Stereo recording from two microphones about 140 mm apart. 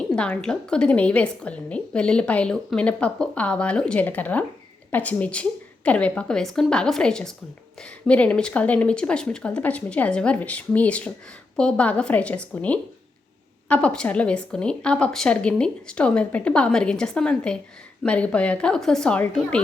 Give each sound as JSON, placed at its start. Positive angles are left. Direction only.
{"t": 0.2, "sound": "a woman's voice", "side_deg": 5}